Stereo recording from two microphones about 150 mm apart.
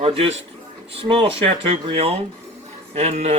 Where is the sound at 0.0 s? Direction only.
40° right (ahead or behind).